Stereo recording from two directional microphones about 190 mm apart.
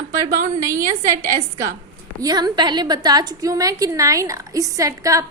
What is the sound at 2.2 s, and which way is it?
A woman's voice, 20° right (ahead or behind).